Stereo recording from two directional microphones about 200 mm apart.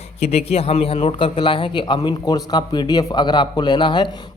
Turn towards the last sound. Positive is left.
turn(degrees=20)  # may be behind; listen again after turning